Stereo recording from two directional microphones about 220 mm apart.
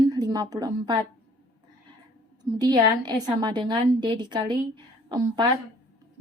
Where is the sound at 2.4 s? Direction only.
20° right (ahead or behind).